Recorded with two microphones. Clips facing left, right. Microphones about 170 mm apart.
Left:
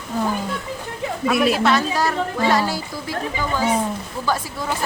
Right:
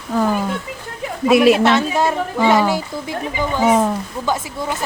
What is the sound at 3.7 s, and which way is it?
Speech, 90° right.